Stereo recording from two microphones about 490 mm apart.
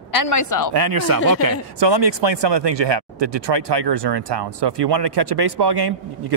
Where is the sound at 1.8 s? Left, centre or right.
Right.